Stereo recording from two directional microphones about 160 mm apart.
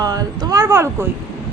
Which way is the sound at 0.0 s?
25° right (ahead or behind).